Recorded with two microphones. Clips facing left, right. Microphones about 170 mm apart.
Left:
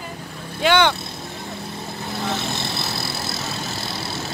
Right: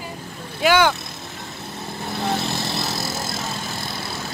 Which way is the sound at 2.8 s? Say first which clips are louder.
Right 2 dB; 40° right (ahead or behind).